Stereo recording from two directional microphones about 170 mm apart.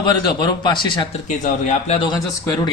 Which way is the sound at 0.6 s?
25° left (ahead or behind).